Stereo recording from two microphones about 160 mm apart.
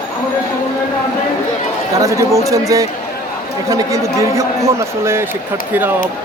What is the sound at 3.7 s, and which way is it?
Speech, 20° right (ahead or behind).